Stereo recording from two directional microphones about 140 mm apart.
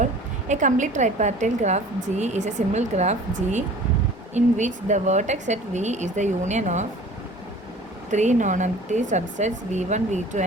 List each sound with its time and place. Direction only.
0.0 s a woman's voice: 60° right (ahead or behind)
8.1 s a woman's voice: 60° right (ahead or behind)